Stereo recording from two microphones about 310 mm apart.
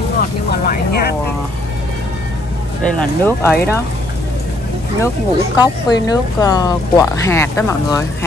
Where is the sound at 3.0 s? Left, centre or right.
Centre.